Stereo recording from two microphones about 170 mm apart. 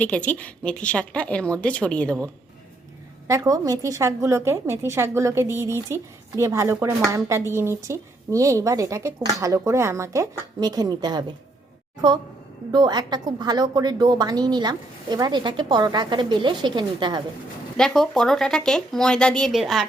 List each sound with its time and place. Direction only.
0.0 s a woman's voice: 10° left (ahead or behind)
3.2 s a woman's voice: 20° right (ahead or behind)
12.7 s a woman's voice: 25° right (ahead or behind)
17.7 s speech: 5° left (ahead or behind)